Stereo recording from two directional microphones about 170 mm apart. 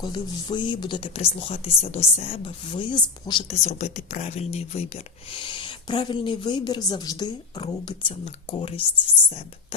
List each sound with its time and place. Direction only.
0.0 s speech: 25° left (ahead or behind)
3.5 s speech: 40° left (ahead or behind)